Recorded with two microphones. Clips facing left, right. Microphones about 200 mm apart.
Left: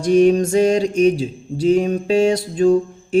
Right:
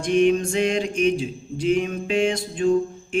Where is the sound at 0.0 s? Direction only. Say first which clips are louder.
Left 5 dB; 40° left (ahead or behind).